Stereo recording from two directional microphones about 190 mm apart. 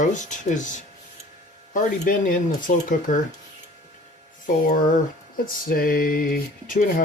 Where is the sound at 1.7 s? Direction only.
45° left (ahead or behind).